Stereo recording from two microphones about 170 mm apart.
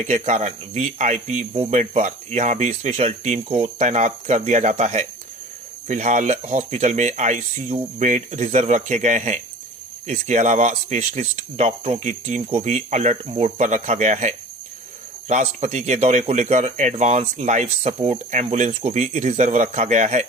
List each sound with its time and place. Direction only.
0.0 s speech: 40° right (ahead or behind)